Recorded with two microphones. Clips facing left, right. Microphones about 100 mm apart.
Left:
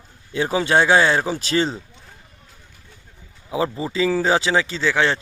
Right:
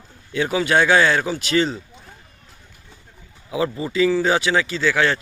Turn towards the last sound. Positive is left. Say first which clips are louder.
# even
turn(degrees=25)  # may be behind; listen again after turning